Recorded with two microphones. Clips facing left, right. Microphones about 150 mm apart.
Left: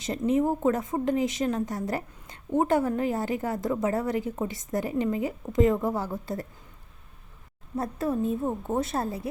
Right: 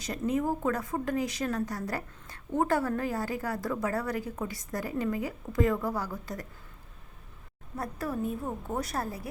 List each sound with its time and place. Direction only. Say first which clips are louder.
0.0 s a woman's voice: left 5 dB; 25° left (ahead or behind)
7.8 s a woman's voice: left 5 dB; 25° left (ahead or behind)